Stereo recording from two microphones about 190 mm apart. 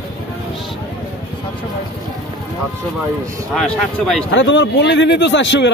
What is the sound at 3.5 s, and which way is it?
Speech, centre (ahead or behind).